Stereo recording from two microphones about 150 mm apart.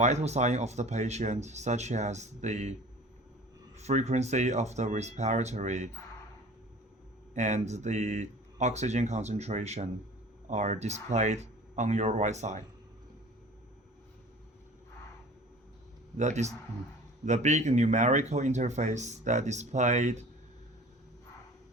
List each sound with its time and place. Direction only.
0.0 s speech: 50° right (ahead or behind)
3.8 s speech: 50° right (ahead or behind)
7.3 s speech: 50° right (ahead or behind)
16.1 s speech: 50° right (ahead or behind)